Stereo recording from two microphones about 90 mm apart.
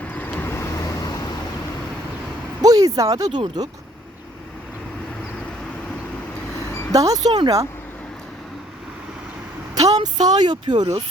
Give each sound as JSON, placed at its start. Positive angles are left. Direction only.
{"t": 0.0, "sound": "vehicle", "side_deg": 20}
{"t": 2.6, "sound": "a sound", "side_deg": -45}
{"t": 3.6, "sound": "speech", "side_deg": -45}
{"t": 6.9, "sound": "speech", "side_deg": -40}
{"t": 9.8, "sound": "speech", "side_deg": -50}